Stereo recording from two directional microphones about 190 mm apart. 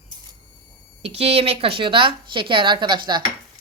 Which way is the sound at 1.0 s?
35° right (ahead or behind).